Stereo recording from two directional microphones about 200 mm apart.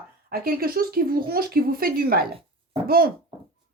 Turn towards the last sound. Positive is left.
turn(degrees=-50)  # may be behind; listen again after turning